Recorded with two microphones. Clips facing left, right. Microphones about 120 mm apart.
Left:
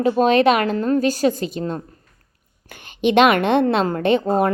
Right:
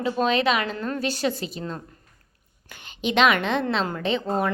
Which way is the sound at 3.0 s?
50° left (ahead or behind).